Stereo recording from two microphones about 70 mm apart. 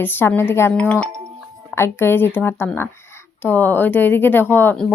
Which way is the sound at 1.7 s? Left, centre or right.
Left.